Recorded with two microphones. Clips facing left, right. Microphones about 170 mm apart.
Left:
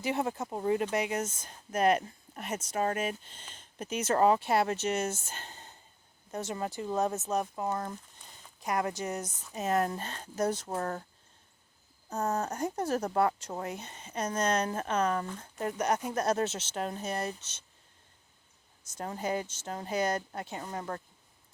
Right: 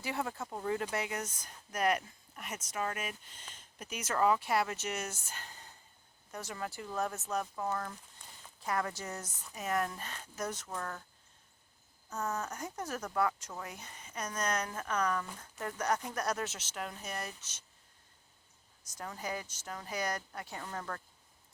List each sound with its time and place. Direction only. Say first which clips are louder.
0.0 s speech: left 6 dB; 20° left (ahead or behind)
9.6 s speech: left 5 dB; 30° left (ahead or behind)
12.0 s speech: left 6 dB; 35° left (ahead or behind)
18.9 s speech: left 7 dB; 30° left (ahead or behind)